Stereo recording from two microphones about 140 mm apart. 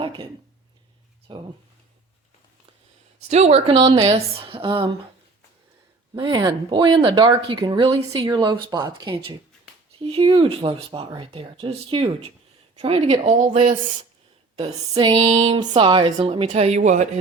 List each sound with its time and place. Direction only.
0.0 s a sound: 35° right (ahead or behind)
1.3 s speech: 35° right (ahead or behind)
3.2 s speech: 50° right (ahead or behind)
6.1 s a woman's voice: 35° right (ahead or behind)
14.9 s female singing: 35° right (ahead or behind)
15.4 s speech: 40° right (ahead or behind); by 17.1 s 55° right (ahead or behind)